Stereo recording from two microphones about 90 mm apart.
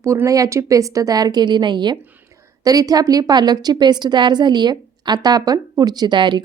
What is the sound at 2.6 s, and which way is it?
A woman's voice, 45° right (ahead or behind).